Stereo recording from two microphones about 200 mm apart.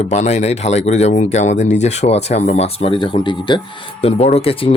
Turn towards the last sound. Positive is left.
turn(degrees=30)  # may be behind; listen again after turning